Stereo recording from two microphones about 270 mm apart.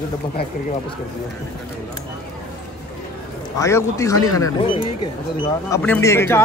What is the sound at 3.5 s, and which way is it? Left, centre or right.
Speech, centre.